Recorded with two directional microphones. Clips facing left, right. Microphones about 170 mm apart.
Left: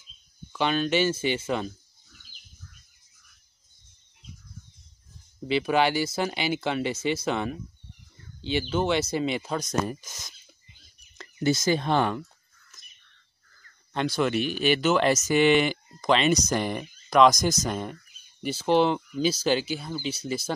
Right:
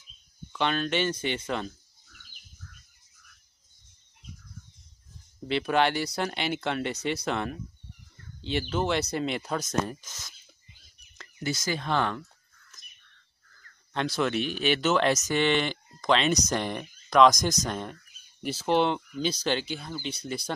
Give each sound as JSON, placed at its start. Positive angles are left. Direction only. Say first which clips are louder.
{"t": 0.5, "sound": "speech", "louder": "left 3 dB", "side_deg": 5}
{"t": 5.5, "sound": "speech", "louder": "left 2 dB", "side_deg": 5}
{"t": 9.8, "sound": "speech", "louder": "left 4 dB", "side_deg": 10}
{"t": 11.1, "sound": "speech", "louder": "left 8 dB", "side_deg": 25}
{"t": 12.0, "sound": "speech", "louder": "left 3 dB", "side_deg": 15}
{"t": 12.8, "sound": "bird", "louder": "right 1 dB", "side_deg": 0}
{"t": 13.9, "sound": "speech", "louder": "left 2 dB", "side_deg": 0}